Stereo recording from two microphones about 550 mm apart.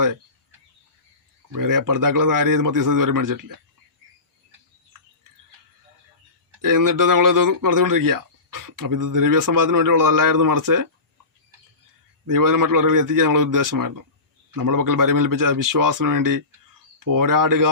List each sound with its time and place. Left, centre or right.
1.5 s speech: right
6.6 s speech: right
12.2 s speech: right